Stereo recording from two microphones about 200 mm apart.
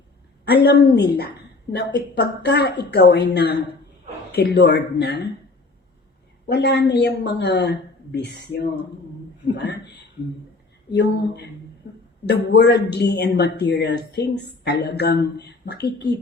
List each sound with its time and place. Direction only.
0.4 s speech: 55° left (ahead or behind)
6.5 s speech: 60° left (ahead or behind)